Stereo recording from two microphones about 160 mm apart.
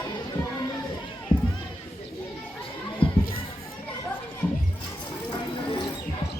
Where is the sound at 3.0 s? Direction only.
35° left (ahead or behind).